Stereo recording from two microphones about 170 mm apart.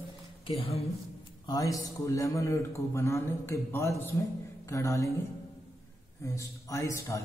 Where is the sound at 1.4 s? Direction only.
20° left (ahead or behind).